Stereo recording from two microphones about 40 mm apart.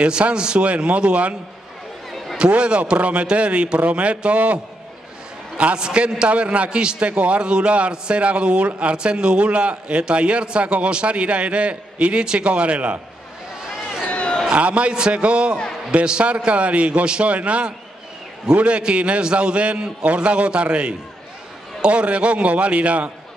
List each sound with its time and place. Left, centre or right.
0.0 s a man's voice: right
2.3 s a man's voice: right
5.6 s a man's voice: right
13.6 s a sound: centre
14.1 s a sound: left
14.5 s a man's voice: right